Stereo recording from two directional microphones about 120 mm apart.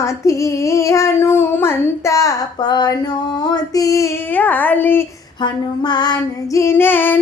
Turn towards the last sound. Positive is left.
turn(degrees=15)  # may be behind; listen again after turning